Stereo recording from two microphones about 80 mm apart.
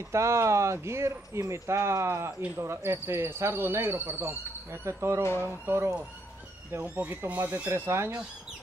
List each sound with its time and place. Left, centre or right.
0.1 s speech: right
5.2 s speech: left
5.7 s speech: right
7.0 s speech: right
7.7 s speech: right